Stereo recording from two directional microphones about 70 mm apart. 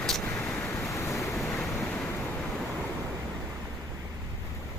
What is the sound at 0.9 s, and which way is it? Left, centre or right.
Waves, left.